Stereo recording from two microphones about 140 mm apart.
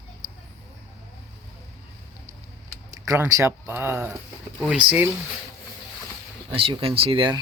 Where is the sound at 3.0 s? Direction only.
20° right (ahead or behind).